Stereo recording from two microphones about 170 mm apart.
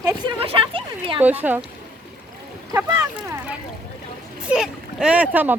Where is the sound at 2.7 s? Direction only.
10° right (ahead or behind).